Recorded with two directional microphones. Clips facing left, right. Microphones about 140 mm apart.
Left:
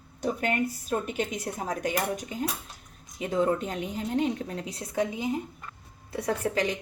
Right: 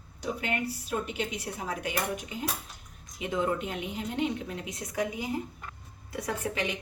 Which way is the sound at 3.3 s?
40° left (ahead or behind).